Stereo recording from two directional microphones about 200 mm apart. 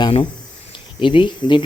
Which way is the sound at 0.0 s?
25° left (ahead or behind).